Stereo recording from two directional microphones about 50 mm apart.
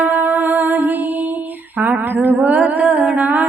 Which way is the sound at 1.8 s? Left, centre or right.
Right.